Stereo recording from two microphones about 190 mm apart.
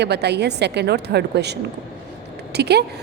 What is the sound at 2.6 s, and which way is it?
Speech, 60° right (ahead or behind).